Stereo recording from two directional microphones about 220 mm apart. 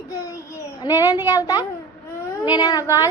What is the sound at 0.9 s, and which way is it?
A woman's voice, 15° left (ahead or behind).